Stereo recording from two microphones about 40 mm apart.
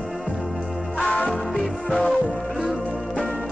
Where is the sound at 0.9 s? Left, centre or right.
Centre.